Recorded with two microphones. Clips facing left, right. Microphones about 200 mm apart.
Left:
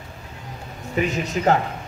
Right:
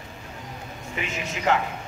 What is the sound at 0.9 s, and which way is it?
Speech, 35° left (ahead or behind).